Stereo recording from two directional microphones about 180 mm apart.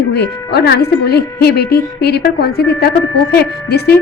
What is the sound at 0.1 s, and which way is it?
A woman's voice, 65° left (ahead or behind).